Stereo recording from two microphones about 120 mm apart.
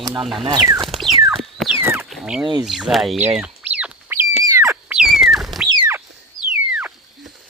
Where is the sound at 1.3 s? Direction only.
Centre (ahead or behind).